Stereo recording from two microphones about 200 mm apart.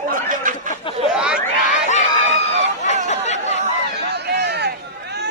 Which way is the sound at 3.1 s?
35° left (ahead or behind).